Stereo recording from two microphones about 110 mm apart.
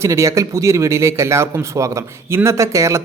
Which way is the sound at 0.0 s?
25° right (ahead or behind).